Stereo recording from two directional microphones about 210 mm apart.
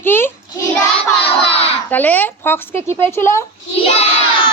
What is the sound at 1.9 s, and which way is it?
A woman's voice, 10° left (ahead or behind).